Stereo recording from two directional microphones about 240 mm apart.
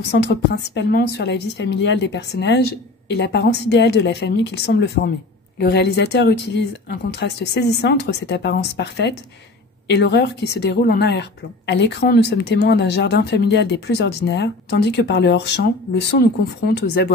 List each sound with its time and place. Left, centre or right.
0.1 s speech: left